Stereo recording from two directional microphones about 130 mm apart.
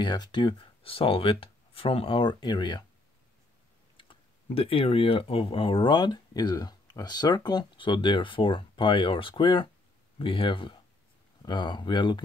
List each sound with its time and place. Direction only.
0.0 s speech: 35° left (ahead or behind)
3.9 s speech: 40° left (ahead or behind)